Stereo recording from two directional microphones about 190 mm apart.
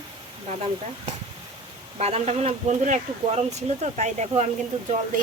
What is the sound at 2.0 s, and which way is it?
Speech, 35° right (ahead or behind).